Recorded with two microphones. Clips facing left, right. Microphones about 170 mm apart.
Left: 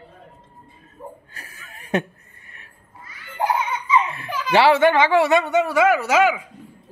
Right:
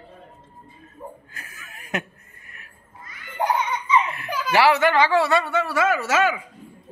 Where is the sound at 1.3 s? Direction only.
35° left (ahead or behind).